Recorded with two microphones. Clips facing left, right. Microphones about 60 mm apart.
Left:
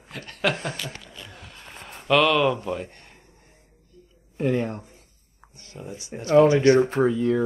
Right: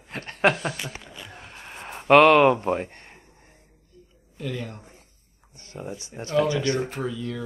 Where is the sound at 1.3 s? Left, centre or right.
Right.